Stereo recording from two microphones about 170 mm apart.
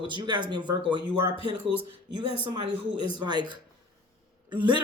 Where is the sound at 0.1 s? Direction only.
25° right (ahead or behind).